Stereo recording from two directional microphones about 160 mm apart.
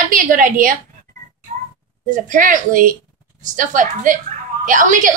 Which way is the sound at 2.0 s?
55° right (ahead or behind).